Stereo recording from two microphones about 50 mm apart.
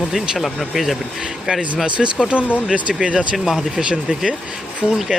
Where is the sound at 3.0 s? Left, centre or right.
Centre.